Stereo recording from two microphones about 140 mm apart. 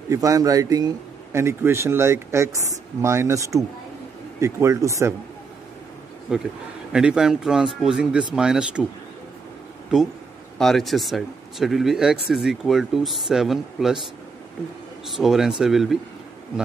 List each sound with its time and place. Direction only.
0.1 s speech: 25° right (ahead or behind)
6.3 s speech: 5° right (ahead or behind)
10.6 s speech: centre (ahead or behind)
15.0 s speech: centre (ahead or behind)